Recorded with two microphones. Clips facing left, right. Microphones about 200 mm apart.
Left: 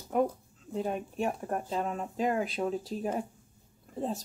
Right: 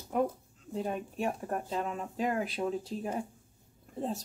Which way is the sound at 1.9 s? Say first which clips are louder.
Left 2 dB; 35° left (ahead or behind).